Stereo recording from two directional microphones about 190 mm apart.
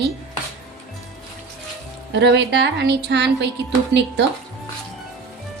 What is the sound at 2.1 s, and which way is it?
A woman's voice, 65° right (ahead or behind).